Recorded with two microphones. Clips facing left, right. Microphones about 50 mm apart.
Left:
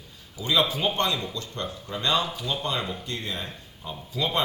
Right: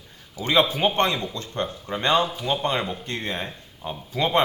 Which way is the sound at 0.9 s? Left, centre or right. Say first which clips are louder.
Right 4 dB; right.